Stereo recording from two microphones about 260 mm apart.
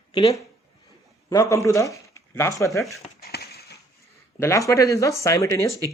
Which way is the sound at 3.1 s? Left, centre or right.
Left.